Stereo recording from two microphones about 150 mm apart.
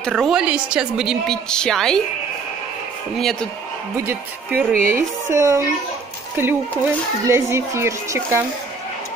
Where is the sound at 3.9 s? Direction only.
20° right (ahead or behind).